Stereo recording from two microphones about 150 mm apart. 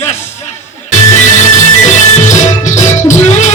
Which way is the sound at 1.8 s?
55° left (ahead or behind).